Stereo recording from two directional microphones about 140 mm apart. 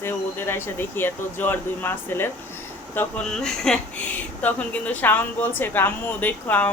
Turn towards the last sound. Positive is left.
turn(degrees=10)  # may be behind; listen again after turning